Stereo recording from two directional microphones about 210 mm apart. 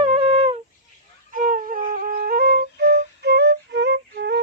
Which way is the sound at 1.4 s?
40° right (ahead or behind).